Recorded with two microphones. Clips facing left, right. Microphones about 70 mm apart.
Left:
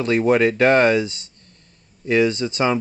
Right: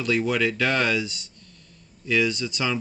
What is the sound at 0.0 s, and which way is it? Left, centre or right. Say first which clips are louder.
Speech: left 7 dB; left.